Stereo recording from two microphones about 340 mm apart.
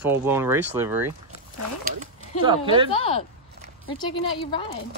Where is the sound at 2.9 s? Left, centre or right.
Centre.